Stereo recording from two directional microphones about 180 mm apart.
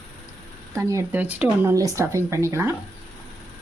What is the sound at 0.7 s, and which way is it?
Speech, 15° right (ahead or behind).